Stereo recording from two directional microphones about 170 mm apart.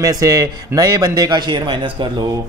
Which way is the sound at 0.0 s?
20° right (ahead or behind).